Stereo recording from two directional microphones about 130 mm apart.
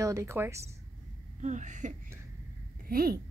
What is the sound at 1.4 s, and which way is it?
Speech, 70° right (ahead or behind).